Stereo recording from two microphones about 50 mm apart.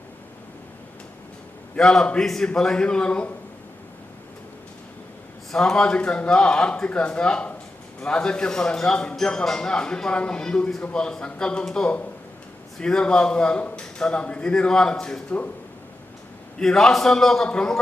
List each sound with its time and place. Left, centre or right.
1.8 s a man's voice: centre
5.5 s a man's voice: centre
16.6 s speech: centre
17.5 s a man's voice: centre